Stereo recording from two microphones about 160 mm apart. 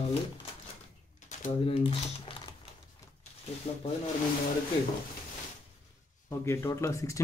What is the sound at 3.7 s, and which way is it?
Speech, 40° left (ahead or behind).